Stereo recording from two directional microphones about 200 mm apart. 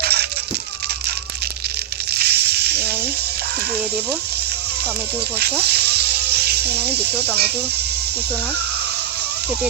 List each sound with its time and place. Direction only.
0.0 s rattle: 55° right (ahead or behind)
2.1 s a sound: 55° right (ahead or behind)
5.4 s music: 55° right (ahead or behind)